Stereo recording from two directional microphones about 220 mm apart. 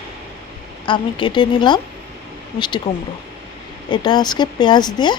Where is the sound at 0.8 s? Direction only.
20° left (ahead or behind).